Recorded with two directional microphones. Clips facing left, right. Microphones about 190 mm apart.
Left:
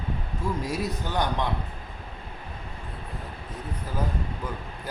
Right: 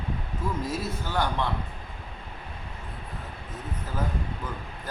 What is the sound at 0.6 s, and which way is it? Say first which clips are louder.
Speech: left 2 dB; 15° left (ahead or behind).